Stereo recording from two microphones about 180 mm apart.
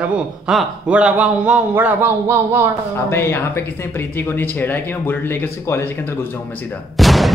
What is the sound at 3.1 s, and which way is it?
Speech, 15° left (ahead or behind).